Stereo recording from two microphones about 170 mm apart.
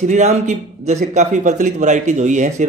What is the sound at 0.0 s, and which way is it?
Speech, 45° right (ahead or behind).